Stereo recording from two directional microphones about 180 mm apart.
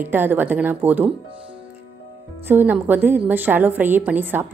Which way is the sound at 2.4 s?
10° right (ahead or behind).